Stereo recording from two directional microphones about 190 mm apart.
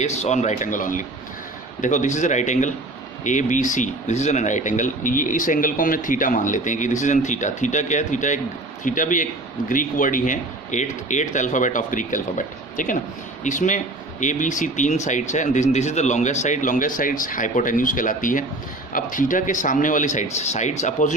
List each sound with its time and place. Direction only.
0.0 s speech: 35° left (ahead or behind)